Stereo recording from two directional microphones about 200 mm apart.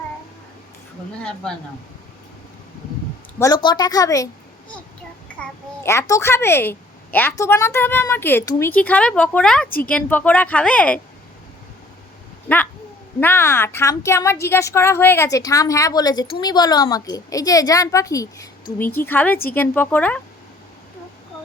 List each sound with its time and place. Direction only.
1.2 s speech: 5° left (ahead or behind)
3.3 s a woman's voice: 20° left (ahead or behind)
5.4 s a child's voice: 15° left (ahead or behind)
9.6 s a woman's voice: 45° left (ahead or behind)
9.9 s a child's voice: 10° left (ahead or behind)
13.1 s a child's voice: 10° left (ahead or behind)